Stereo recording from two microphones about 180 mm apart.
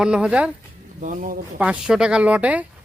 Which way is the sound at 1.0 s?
50° right (ahead or behind).